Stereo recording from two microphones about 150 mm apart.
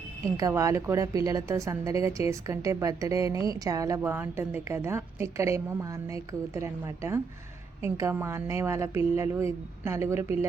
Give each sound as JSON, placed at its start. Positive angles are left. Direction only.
{"t": 0.3, "sound": "a woman's voice", "side_deg": -20}